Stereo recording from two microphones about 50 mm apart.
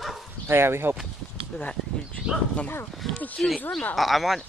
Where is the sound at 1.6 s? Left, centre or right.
Left.